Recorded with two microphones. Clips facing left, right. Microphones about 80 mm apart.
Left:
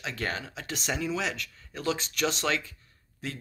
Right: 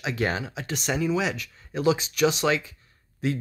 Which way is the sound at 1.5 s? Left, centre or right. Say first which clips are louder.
Right 11 dB; centre.